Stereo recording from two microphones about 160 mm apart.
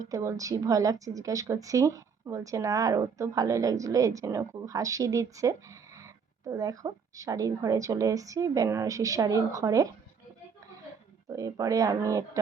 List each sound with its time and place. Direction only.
0.0 s a woman's voice: 20° right (ahead or behind)
11.3 s a woman's voice: 20° right (ahead or behind)